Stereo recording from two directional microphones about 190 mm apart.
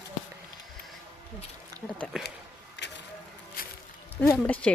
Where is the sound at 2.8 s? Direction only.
65° left (ahead or behind).